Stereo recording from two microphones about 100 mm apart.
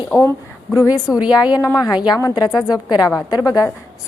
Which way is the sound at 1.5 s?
40° left (ahead or behind).